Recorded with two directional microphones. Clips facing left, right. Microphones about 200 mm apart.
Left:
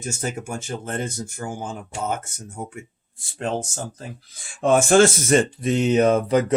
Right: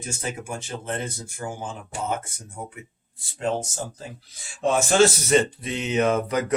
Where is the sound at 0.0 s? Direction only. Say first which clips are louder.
Left 3 dB; 45° left (ahead or behind).